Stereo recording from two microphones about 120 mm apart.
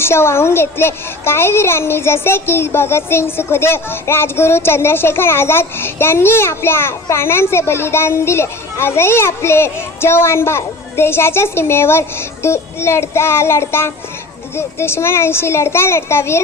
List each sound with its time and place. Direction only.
0.0 s a child's voice: 20° left (ahead or behind)